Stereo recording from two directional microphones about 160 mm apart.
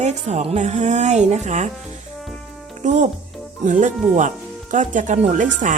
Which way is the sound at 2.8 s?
50° right (ahead or behind).